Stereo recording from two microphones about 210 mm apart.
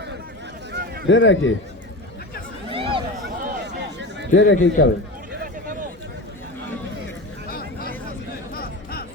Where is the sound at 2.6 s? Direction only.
25° right (ahead or behind).